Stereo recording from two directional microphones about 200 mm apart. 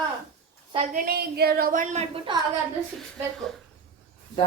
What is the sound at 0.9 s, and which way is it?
A woman's voice, 50° right (ahead or behind).